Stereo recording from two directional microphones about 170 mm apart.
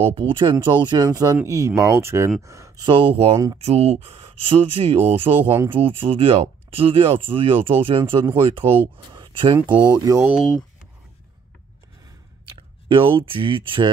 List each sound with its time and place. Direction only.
0.0 s speech: 30° right (ahead or behind)
3.5 s speech: 35° right (ahead or behind)
5.4 s speech: 15° right (ahead or behind)
5.8 s speech: 35° right (ahead or behind)
9.1 s a sound: 25° right (ahead or behind)
9.7 s speech: 25° right (ahead or behind)
12.4 s speech: 30° right (ahead or behind)